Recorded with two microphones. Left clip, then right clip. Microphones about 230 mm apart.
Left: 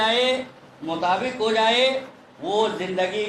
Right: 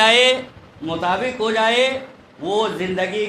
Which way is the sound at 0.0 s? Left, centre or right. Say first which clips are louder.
Right 7 dB; right.